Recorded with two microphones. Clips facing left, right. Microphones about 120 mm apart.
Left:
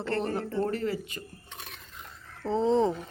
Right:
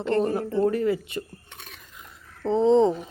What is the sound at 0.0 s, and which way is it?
Speech, 20° right (ahead or behind).